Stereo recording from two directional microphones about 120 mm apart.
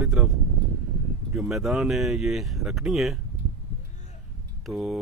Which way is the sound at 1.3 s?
5° right (ahead or behind).